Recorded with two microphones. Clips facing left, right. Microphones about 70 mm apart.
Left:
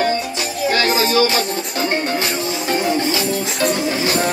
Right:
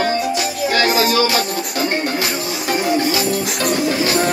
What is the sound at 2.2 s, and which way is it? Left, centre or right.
Music, centre.